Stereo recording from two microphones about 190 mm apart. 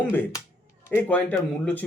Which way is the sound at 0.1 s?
10° left (ahead or behind).